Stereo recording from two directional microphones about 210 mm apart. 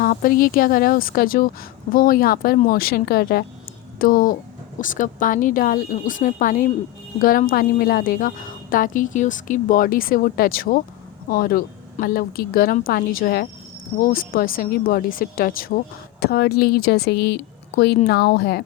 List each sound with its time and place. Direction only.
0.0 s a woman's voice: 40° left (ahead or behind)